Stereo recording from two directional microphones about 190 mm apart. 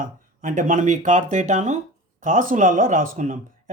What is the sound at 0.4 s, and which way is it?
Speech, 45° right (ahead or behind).